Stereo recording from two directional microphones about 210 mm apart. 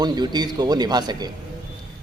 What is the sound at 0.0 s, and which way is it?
A man's voice, 20° right (ahead or behind).